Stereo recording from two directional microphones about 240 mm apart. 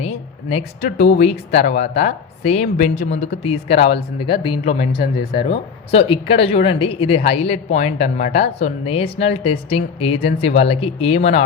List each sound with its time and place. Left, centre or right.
0.0 s speech: left
1.5 s speech: left
1.8 s speech: left